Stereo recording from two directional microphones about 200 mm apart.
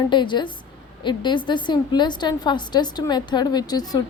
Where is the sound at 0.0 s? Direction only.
25° left (ahead or behind).